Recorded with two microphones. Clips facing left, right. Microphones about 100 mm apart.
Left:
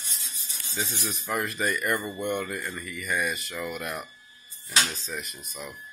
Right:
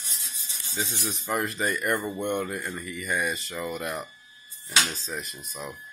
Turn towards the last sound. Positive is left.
turn(degrees=-30)  # may be behind; listen again after turning